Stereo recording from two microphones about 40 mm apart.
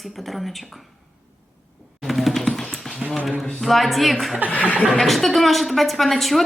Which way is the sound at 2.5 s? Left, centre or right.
Centre.